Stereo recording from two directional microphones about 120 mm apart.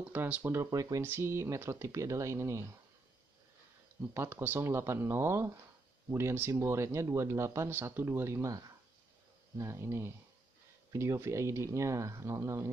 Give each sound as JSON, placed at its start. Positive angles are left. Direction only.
{"t": 0.0, "sound": "speech", "side_deg": -15}
{"t": 4.1, "sound": "speech", "side_deg": -20}